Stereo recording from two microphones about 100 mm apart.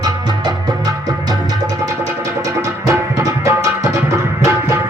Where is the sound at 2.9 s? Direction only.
30° right (ahead or behind).